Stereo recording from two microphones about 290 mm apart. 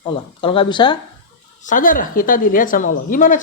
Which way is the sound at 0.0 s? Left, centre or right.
Centre.